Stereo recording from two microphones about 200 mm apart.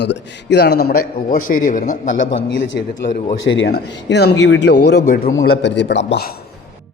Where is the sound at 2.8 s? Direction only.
55° left (ahead or behind).